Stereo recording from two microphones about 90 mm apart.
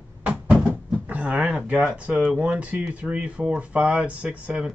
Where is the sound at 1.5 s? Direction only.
10° right (ahead or behind).